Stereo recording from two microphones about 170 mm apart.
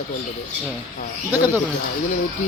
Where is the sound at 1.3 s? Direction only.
10° right (ahead or behind).